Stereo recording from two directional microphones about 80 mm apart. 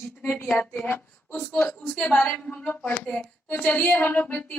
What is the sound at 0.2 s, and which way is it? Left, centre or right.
A woman's voice, left.